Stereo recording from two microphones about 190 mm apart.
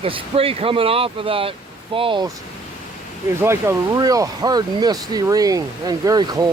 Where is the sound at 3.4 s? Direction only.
15° right (ahead or behind).